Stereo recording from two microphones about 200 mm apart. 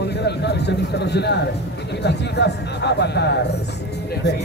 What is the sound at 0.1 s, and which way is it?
Speech, 55° left (ahead or behind).